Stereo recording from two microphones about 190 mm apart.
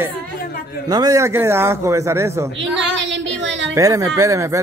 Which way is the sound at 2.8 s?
70° right (ahead or behind).